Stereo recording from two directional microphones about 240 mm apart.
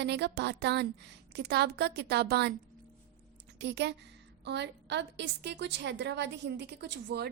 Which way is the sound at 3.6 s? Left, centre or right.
Right.